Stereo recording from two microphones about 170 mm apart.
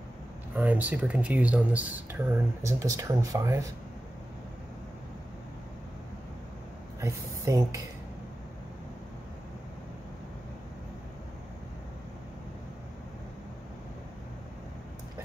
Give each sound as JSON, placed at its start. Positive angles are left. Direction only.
{"t": 0.6, "sound": "speech", "side_deg": -10}
{"t": 7.0, "sound": "speech", "side_deg": -20}